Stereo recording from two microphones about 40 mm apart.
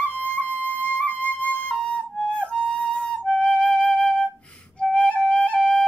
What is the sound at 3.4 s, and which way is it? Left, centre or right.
Flute, left.